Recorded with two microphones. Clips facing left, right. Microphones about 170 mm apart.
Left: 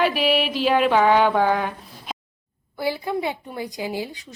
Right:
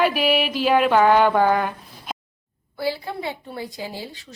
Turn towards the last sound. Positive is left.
turn(degrees=15)  # may be behind; listen again after turning